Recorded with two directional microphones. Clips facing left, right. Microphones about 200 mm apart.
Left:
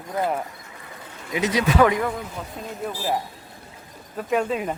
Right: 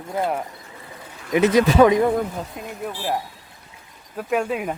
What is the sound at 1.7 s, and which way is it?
Speech, 20° right (ahead or behind).